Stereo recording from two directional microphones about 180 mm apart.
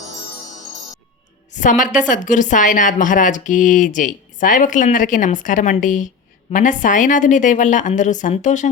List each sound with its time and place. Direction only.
1.5 s a woman's voice: 45° left (ahead or behind)